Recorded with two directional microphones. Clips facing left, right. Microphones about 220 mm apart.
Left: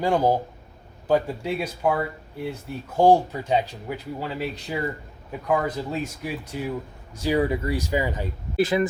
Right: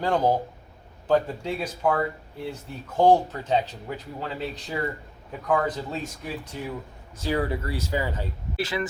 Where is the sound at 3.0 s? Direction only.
10° left (ahead or behind).